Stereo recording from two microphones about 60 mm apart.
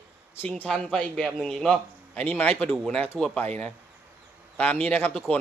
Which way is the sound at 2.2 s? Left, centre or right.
Left.